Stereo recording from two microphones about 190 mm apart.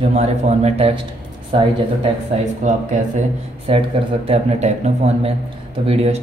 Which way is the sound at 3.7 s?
30° right (ahead or behind).